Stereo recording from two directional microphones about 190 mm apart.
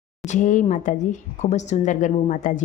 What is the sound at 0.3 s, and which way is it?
Speech, 40° left (ahead or behind).